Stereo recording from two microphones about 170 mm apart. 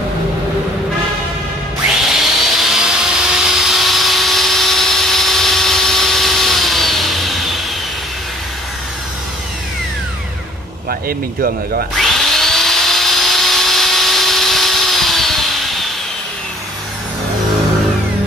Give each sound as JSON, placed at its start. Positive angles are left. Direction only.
{"t": 2.0, "sound": "vacuum cleaner", "side_deg": 0}
{"t": 10.9, "sound": "speech", "side_deg": -60}
{"t": 12.0, "sound": "tools", "side_deg": 0}